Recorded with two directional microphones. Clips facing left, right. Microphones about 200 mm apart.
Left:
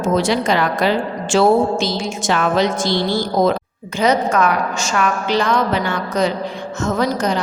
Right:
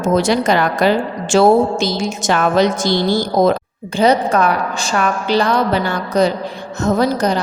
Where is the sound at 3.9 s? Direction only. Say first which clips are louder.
Right 2 dB; 35° right (ahead or behind).